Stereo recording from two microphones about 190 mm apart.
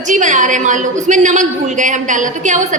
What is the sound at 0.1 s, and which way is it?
A woman's voice, 40° right (ahead or behind).